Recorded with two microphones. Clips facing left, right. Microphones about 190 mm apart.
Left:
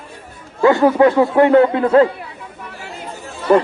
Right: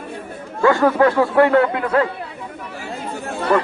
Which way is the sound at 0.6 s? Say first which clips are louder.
Left 3 dB; 20° left (ahead or behind).